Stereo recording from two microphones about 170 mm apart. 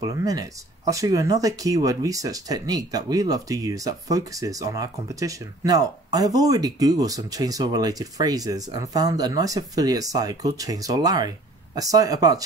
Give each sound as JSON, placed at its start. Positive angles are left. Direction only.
{"t": 0.0, "sound": "speech", "side_deg": -20}